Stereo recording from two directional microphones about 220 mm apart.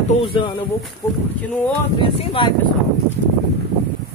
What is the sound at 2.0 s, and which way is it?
Speech, 25° left (ahead or behind).